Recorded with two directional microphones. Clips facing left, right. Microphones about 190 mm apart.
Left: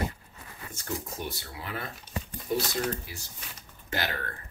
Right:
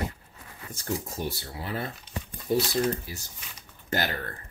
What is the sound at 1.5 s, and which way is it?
Speech, 35° right (ahead or behind).